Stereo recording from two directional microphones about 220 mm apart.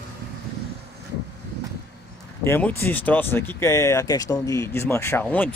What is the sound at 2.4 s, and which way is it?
A man's voice, 10° left (ahead or behind).